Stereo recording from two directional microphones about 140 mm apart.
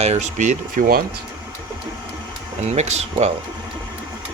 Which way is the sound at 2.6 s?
50° right (ahead or behind).